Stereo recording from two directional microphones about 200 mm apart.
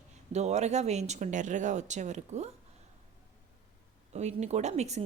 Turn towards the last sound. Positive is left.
turn(degrees=-35)  # may be behind; listen again after turning